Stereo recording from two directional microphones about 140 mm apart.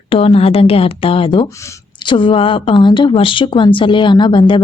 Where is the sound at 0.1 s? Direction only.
45° left (ahead or behind).